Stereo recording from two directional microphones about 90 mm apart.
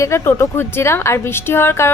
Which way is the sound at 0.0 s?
30° left (ahead or behind).